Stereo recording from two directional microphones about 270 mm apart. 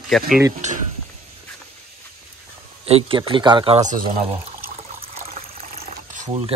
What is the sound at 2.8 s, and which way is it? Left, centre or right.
Speech, centre.